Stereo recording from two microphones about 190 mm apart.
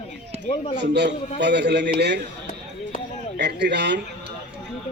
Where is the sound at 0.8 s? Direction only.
65° right (ahead or behind).